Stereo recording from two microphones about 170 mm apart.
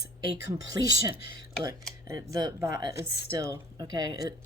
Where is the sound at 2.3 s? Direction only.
20° right (ahead or behind).